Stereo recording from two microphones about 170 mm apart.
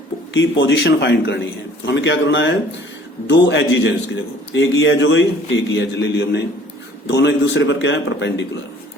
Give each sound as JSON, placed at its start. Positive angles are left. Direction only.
{"t": 0.3, "sound": "a man's voice", "side_deg": 90}